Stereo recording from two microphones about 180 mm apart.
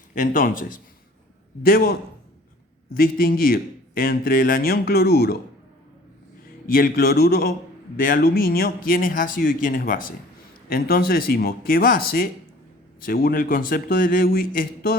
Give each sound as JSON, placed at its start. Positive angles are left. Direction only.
{"t": 0.1, "sound": "a man's voice", "side_deg": 50}
{"t": 6.7, "sound": "a man's voice", "side_deg": 55}